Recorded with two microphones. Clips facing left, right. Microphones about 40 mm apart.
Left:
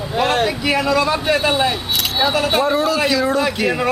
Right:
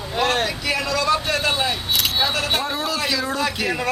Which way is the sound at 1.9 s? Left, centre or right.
Centre.